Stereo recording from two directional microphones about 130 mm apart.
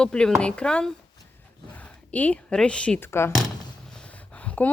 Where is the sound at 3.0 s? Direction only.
20° left (ahead or behind).